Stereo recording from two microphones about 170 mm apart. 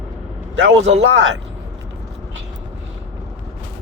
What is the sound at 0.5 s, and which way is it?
Speech, 90° right.